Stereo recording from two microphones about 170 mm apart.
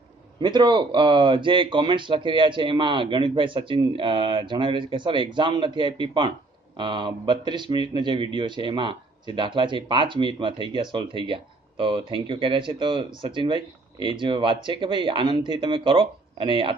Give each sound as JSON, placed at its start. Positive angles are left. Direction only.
{"t": 0.4, "sound": "speech", "side_deg": -25}